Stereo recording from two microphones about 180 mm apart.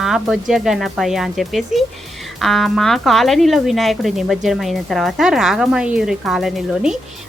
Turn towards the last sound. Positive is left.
turn(degrees=0)  # may be behind; listen again after turning